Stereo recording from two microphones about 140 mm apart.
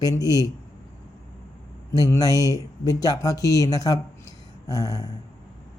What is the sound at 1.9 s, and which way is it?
Speech, 25° left (ahead or behind).